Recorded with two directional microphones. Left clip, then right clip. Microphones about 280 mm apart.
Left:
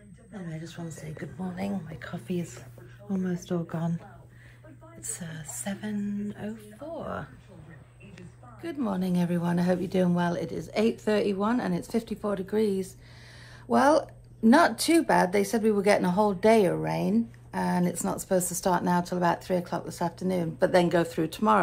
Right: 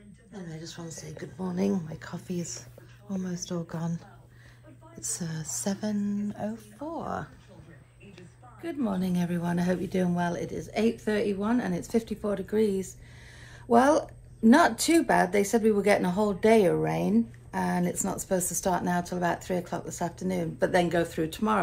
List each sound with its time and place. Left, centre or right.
0.5 s a woman's voice: centre
0.9 s speech: centre
1.7 s speech: right
3.1 s speech: centre
3.6 s speech: centre
5.4 s speech: centre
8.5 s a woman's voice: centre